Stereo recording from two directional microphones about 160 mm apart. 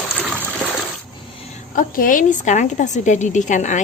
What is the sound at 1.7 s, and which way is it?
A woman's voice, 60° left (ahead or behind).